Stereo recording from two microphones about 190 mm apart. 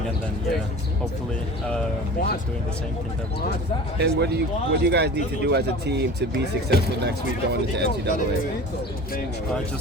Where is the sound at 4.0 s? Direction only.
60° right (ahead or behind).